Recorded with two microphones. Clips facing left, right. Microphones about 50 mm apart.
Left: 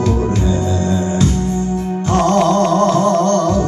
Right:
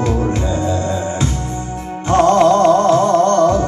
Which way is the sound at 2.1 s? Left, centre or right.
Centre.